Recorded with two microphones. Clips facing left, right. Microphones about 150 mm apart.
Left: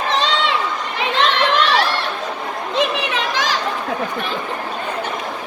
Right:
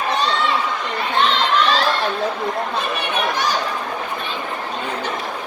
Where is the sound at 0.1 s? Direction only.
90° left.